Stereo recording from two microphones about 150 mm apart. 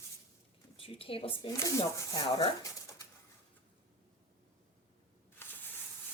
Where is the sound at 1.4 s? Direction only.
20° left (ahead or behind).